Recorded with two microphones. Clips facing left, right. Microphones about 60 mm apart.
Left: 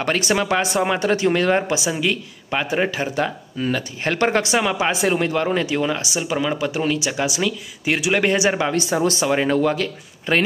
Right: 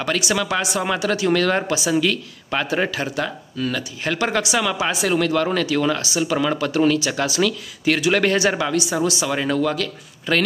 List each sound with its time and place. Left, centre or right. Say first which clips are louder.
0.0 s speech: left 2 dB; left
8.7 s speech: left 1 dB; left